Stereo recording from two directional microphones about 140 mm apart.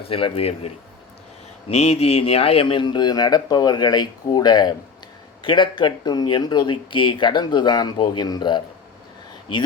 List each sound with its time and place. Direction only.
0.1 s speech: 40° left (ahead or behind)
1.7 s speech: 50° left (ahead or behind); by 8.6 s 30° left (ahead or behind)